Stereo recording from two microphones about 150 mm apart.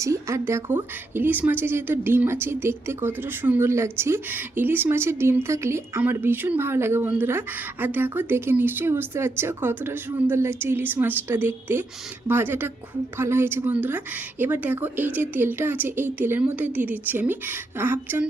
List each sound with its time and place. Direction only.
0.0 s speech: 20° right (ahead or behind)